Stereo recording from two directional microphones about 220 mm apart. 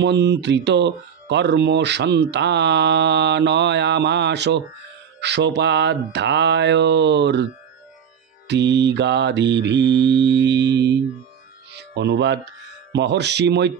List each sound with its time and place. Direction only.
0.0 s speech: 50° right (ahead or behind)
8.5 s speech: 50° right (ahead or behind)
11.7 s music: 50° right (ahead or behind)
12.9 s speech: 50° right (ahead or behind)